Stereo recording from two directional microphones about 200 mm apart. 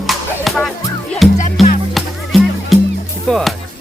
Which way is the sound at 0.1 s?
Centre (ahead or behind).